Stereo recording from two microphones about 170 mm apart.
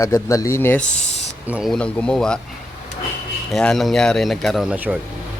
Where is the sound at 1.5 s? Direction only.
5° right (ahead or behind).